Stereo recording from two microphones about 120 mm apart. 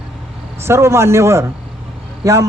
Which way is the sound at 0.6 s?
20° right (ahead or behind).